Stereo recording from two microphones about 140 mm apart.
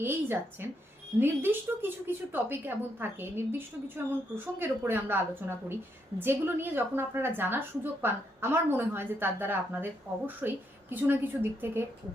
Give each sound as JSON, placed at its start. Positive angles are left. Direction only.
{"t": 0.0, "sound": "a woman's voice", "side_deg": -15}
{"t": 4.6, "sound": "a woman's voice", "side_deg": -15}